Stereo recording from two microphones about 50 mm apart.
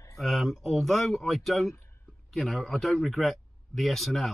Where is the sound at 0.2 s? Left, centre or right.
Centre.